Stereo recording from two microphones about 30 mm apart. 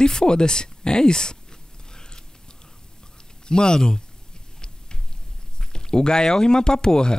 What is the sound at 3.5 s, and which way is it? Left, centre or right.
Speech, left.